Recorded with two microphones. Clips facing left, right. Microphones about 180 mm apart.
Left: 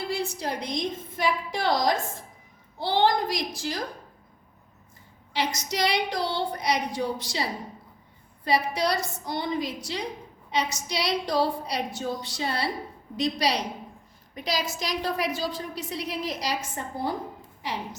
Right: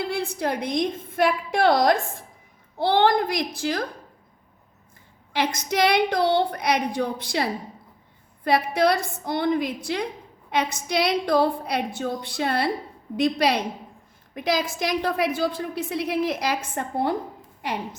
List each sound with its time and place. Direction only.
0.1 s a woman's voice: 60° right (ahead or behind)
5.3 s a woman's voice: 55° right (ahead or behind)
8.4 s a woman's voice: 55° right (ahead or behind)